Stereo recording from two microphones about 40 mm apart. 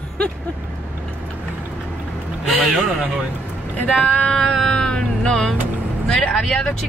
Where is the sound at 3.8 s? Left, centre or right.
Left.